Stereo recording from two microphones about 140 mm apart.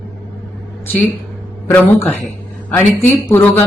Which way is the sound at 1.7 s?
15° left (ahead or behind).